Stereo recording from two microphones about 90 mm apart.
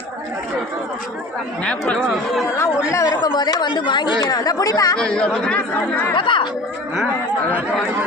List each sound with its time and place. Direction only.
1.6 s speech: 10° left (ahead or behind)
2.6 s chatter: 35° left (ahead or behind)
3.2 s speech: 55° left (ahead or behind)
4.9 s speech: 10° left (ahead or behind)
6.1 s speech: 65° left (ahead or behind)